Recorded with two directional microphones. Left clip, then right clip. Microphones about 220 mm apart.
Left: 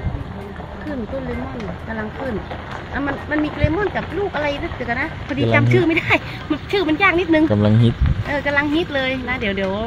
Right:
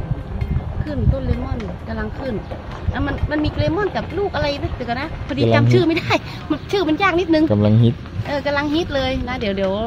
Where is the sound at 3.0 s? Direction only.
Centre (ahead or behind).